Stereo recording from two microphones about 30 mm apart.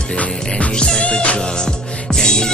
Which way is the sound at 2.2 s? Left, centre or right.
Left.